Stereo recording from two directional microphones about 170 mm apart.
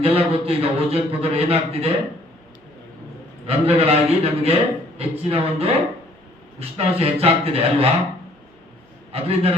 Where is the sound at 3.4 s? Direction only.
35° right (ahead or behind).